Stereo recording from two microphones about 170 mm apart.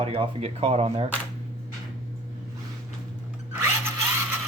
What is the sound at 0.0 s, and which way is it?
Speech, 35° right (ahead or behind).